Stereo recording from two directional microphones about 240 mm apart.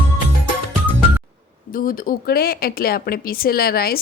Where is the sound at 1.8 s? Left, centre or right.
Left.